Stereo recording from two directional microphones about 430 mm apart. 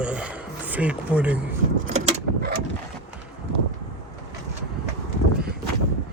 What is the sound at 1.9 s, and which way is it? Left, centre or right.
Vehicle, centre.